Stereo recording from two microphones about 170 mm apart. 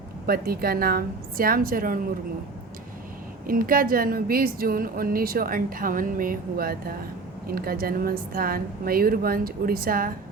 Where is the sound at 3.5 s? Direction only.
55° right (ahead or behind).